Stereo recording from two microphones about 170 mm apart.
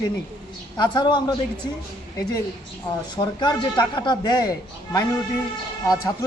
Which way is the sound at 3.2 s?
25° left (ahead or behind).